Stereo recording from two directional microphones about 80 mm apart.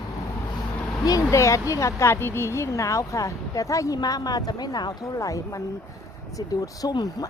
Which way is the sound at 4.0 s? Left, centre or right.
Left.